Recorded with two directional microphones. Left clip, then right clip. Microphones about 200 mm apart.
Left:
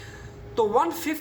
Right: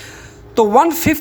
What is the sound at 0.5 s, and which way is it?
Speech, 55° right (ahead or behind).